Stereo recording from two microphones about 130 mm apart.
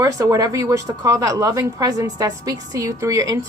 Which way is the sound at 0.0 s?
25° right (ahead or behind).